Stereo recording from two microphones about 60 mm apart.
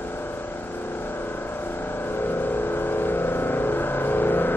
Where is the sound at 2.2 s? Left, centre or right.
Left.